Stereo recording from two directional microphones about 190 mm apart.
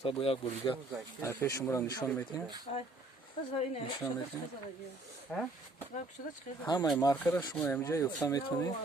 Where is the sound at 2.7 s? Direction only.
35° left (ahead or behind).